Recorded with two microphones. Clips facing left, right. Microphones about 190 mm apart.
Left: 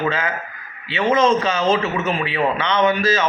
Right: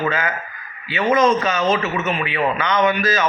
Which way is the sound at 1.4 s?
30° left (ahead or behind).